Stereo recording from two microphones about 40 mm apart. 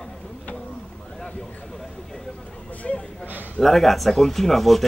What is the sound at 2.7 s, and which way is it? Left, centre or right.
Speech, left.